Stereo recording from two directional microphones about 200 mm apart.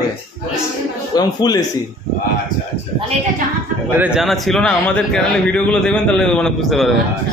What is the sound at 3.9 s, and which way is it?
A man's voice, 5° right (ahead or behind).